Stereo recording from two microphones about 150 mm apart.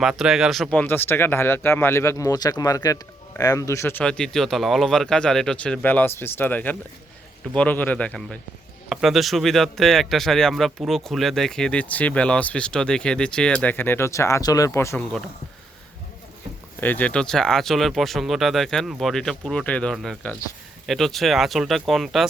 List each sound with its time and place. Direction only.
0.0 s speech: 5° right (ahead or behind); by 15.0 s 20° left (ahead or behind)
16.8 s speech: 10° left (ahead or behind)